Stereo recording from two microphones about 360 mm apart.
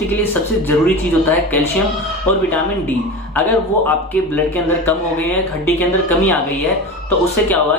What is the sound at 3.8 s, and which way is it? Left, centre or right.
Speech, centre.